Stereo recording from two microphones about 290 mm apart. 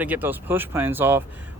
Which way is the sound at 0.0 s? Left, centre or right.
Centre.